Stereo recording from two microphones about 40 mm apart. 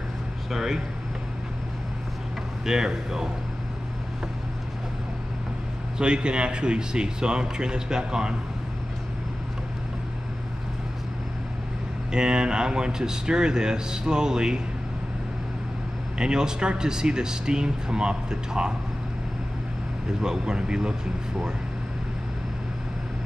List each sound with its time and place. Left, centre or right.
0.5 s speech: centre
2.6 s speech: centre
5.9 s speech: right
12.1 s speech: centre
16.2 s speech: centre
20.2 s speech: right